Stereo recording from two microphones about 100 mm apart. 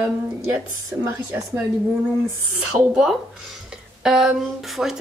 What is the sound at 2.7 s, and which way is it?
Speech, 30° right (ahead or behind).